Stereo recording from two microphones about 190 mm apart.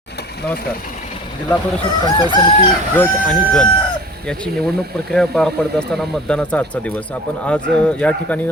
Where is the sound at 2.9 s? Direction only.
5° left (ahead or behind).